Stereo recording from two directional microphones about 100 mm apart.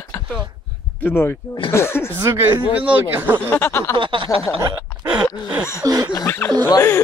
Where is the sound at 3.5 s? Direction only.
25° left (ahead or behind).